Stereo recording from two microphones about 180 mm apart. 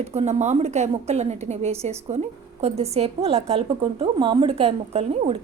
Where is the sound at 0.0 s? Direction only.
35° right (ahead or behind).